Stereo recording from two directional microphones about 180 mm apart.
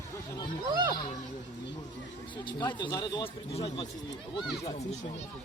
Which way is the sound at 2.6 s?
25° left (ahead or behind).